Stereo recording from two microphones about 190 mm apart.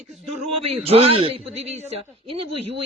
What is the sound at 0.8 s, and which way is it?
A man's voice, 30° right (ahead or behind).